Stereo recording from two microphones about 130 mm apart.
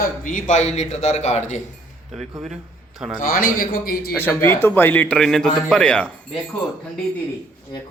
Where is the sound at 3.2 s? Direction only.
90° left.